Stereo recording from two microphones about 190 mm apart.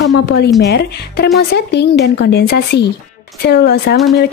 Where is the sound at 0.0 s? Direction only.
60° left (ahead or behind).